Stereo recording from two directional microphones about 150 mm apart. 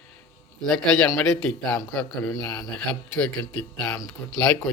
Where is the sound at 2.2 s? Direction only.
20° left (ahead or behind).